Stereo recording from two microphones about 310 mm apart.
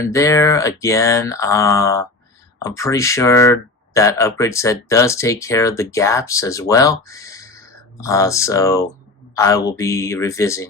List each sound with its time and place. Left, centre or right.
0.0 s speech: centre